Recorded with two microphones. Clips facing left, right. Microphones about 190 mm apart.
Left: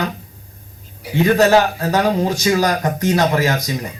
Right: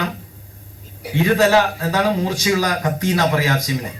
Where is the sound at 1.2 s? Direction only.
40° left (ahead or behind).